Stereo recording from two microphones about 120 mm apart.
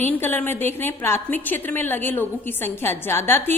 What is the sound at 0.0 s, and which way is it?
A woman's voice, 15° left (ahead or behind).